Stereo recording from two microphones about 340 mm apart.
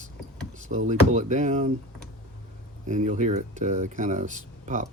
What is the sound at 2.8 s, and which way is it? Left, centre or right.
Speech, right.